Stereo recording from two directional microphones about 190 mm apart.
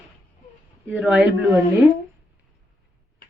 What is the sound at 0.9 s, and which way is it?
Speech, 5° right (ahead or behind).